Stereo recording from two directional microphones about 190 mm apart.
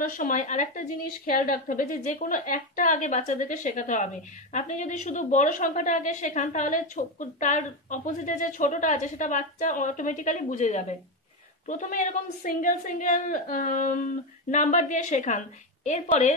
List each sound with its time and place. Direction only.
0.1 s a woman's voice: 45° left (ahead or behind)